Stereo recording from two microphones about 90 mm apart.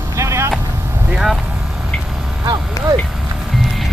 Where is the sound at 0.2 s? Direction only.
30° right (ahead or behind).